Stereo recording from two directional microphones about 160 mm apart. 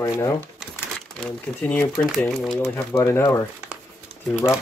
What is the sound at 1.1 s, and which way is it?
Speech, 5° left (ahead or behind).